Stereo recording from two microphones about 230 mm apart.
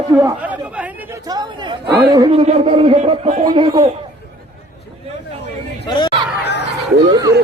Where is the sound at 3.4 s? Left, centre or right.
Right.